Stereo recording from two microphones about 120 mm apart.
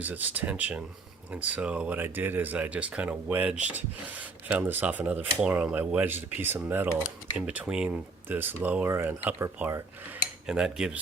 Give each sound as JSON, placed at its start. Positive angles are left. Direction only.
{"t": 0.0, "sound": "speech", "side_deg": -15}
{"t": 7.9, "sound": "speech", "side_deg": -15}
{"t": 10.4, "sound": "cutlery", "side_deg": -5}